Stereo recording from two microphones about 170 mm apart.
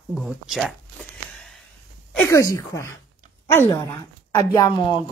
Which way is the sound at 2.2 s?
20° left (ahead or behind).